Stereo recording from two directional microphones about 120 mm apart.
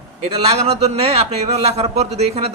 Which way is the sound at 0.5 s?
55° right (ahead or behind).